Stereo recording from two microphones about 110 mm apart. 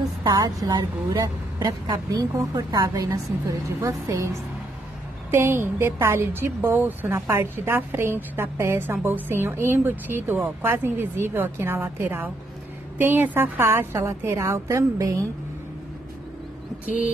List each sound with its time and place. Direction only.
0.2 s a woman's voice: 35° right (ahead or behind)